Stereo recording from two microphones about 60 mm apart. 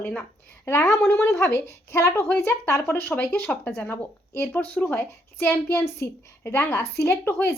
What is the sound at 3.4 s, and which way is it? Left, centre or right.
Speech, centre.